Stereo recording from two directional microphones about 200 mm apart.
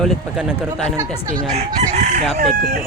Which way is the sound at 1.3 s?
35° right (ahead or behind).